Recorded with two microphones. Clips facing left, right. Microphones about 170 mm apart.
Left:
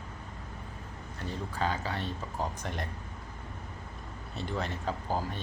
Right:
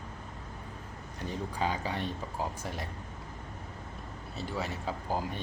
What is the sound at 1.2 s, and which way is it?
Speech, 15° right (ahead or behind).